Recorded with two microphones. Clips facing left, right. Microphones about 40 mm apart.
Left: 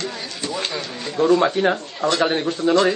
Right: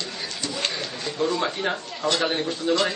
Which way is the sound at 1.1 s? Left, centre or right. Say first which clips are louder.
Left 8 dB; left.